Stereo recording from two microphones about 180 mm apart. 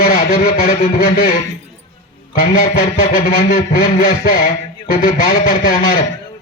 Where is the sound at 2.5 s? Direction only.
50° left (ahead or behind).